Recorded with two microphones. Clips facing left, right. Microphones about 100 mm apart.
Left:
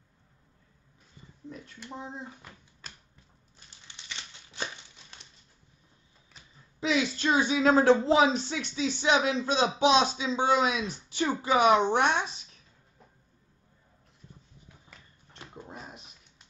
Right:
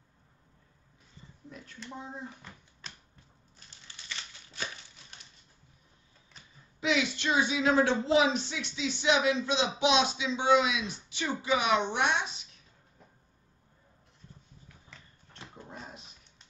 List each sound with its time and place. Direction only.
2.4 s a child's voice: 10° left (ahead or behind)
3.5 s crushing: 20° left (ahead or behind)
6.8 s speech: 35° left (ahead or behind)